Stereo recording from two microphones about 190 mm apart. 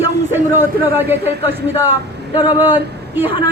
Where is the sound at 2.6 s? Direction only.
10° right (ahead or behind).